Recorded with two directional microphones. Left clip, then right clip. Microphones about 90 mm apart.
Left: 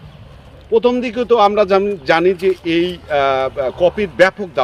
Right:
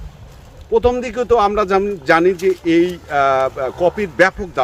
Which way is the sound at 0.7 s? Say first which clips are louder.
Left 1 dB; 45° right (ahead or behind).